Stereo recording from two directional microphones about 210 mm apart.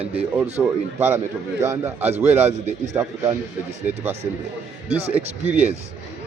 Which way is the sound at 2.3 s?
30° right (ahead or behind).